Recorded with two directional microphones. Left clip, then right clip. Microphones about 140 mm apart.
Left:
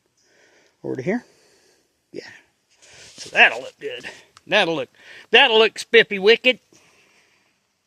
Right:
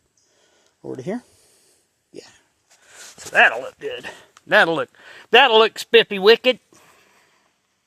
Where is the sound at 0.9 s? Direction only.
65° left (ahead or behind).